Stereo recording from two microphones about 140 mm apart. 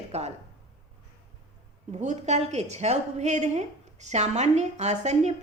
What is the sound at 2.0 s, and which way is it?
A woman's voice, 55° right (ahead or behind).